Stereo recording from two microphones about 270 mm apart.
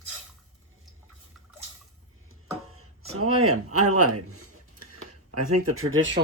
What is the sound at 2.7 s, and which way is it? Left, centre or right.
A man's voice, right.